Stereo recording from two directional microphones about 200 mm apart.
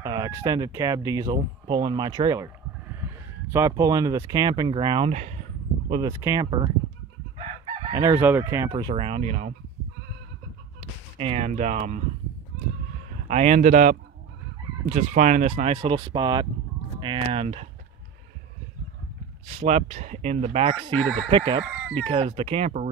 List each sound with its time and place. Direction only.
0.0 s speech: 20° right (ahead or behind)
4.3 s fowl: 20° right (ahead or behind)
5.1 s speech: 35° right (ahead or behind)
5.9 s speech: 25° right (ahead or behind)
6.1 s fowl: 15° right (ahead or behind)
7.9 s fowl: 15° right (ahead or behind); by 9.5 s 35° right (ahead or behind)
11.1 s speech: 30° right (ahead or behind)
13.3 s speech: 35° right (ahead or behind)
17.0 s fowl: 25° right (ahead or behind)
19.5 s speech: 30° right (ahead or behind)
21.3 s fowl: 25° right (ahead or behind)